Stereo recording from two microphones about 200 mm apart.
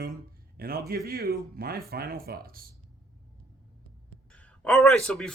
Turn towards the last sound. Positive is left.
turn(degrees=5)  # may be behind; listen again after turning